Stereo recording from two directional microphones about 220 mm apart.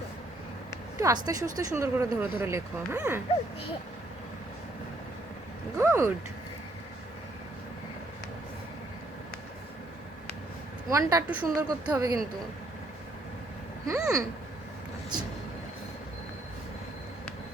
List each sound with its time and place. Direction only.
0.9 s speech: 15° right (ahead or behind)
5.7 s speech: 10° right (ahead or behind)
10.8 s speech: 15° right (ahead or behind)
13.8 s speech: 15° right (ahead or behind)